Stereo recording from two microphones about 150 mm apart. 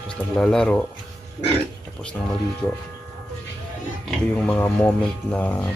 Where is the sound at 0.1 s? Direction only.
5° left (ahead or behind).